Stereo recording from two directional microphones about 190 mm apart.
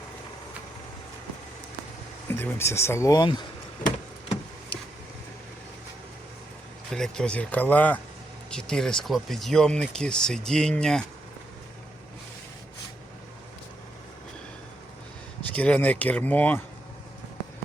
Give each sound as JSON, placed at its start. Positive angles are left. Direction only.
{"t": 2.2, "sound": "speech", "side_deg": 10}
{"t": 3.8, "sound": "vehicle", "side_deg": 25}
{"t": 6.9, "sound": "speech", "side_deg": 5}
{"t": 15.5, "sound": "speech", "side_deg": 5}